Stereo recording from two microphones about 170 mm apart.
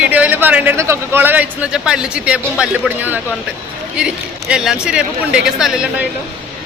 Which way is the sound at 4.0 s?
5° right (ahead or behind).